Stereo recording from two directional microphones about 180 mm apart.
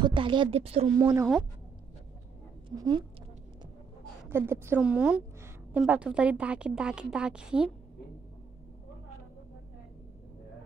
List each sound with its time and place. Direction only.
0.0 s a woman's voice: 25° right (ahead or behind)
0.9 s a woman's voice: 20° right (ahead or behind)
2.7 s a woman's voice: 20° right (ahead or behind)
4.3 s a woman's voice: 15° right (ahead or behind)